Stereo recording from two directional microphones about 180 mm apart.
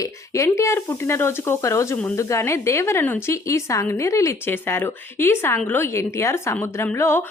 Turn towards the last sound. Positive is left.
turn(degrees=15)  # may be behind; listen again after turning